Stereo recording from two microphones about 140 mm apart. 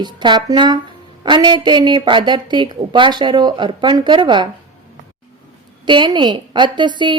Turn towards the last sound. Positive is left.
turn(degrees=-35)  # may be behind; listen again after turning